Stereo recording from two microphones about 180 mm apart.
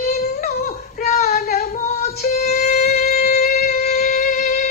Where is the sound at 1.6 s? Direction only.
45° left (ahead or behind).